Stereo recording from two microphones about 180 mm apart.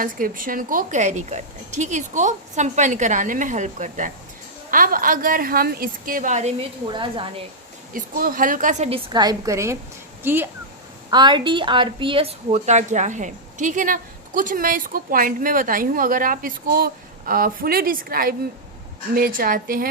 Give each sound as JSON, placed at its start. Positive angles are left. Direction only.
{"t": 0.0, "sound": "a woman's voice", "side_deg": -50}
{"t": 6.9, "sound": "a woman's voice", "side_deg": -25}
{"t": 7.9, "sound": "a woman's voice", "side_deg": -50}
{"t": 11.1, "sound": "a woman's voice", "side_deg": -25}